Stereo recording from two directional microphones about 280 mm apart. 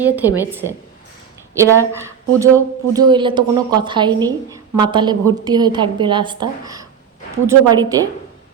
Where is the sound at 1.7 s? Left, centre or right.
Centre.